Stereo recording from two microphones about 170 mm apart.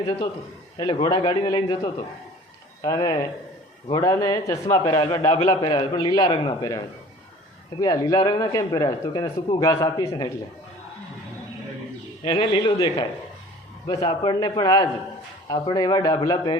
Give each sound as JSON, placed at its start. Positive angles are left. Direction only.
{"t": 0.8, "sound": "a man's voice", "side_deg": 25}
{"t": 12.2, "sound": "speech", "side_deg": 30}
{"t": 12.7, "sound": "a man's voice", "side_deg": 20}